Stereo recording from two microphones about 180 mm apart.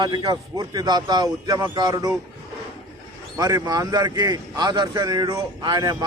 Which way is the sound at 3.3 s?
20° right (ahead or behind).